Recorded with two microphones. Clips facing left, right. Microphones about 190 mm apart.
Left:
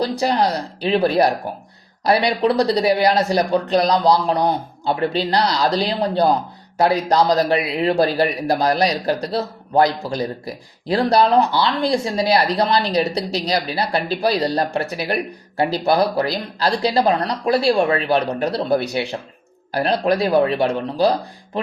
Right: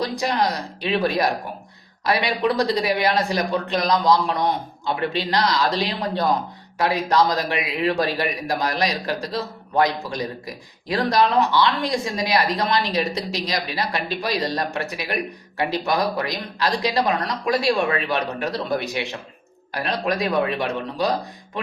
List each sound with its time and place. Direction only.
0.0 s a man's voice: 35° left (ahead or behind)